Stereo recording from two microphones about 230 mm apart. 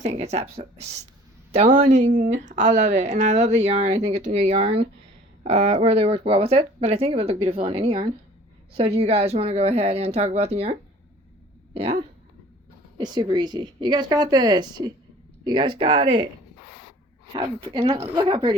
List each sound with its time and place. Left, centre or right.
0.0 s speech: right
13.0 s speech: centre
17.3 s speech: centre